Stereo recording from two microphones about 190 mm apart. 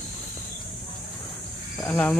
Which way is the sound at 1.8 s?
5° left (ahead or behind).